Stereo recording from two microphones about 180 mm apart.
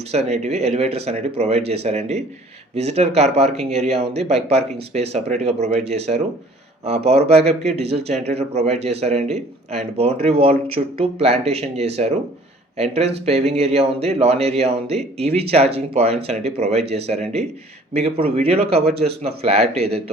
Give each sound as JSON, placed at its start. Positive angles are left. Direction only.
{"t": 0.1, "sound": "speech", "side_deg": -35}